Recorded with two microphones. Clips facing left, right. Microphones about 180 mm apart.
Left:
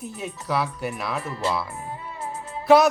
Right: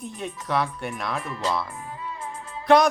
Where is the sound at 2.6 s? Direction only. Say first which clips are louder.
Left 2 dB; 5° left (ahead or behind).